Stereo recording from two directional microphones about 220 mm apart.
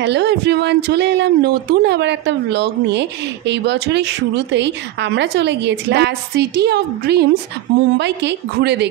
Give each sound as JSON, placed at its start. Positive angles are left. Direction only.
{"t": 0.0, "sound": "speech", "side_deg": -50}